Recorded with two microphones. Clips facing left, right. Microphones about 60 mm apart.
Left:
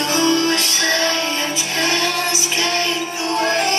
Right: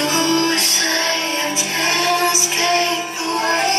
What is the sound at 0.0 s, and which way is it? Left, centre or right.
Music, right.